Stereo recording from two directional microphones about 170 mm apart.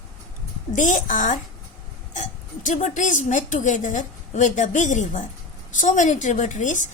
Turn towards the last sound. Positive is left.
turn(degrees=45)  # may be behind; listen again after turning